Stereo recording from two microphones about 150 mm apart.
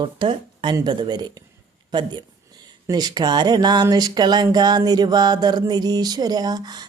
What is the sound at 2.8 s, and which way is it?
Speech, 25° right (ahead or behind).